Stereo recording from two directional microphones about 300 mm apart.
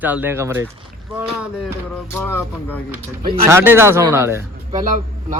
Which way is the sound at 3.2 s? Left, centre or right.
Centre.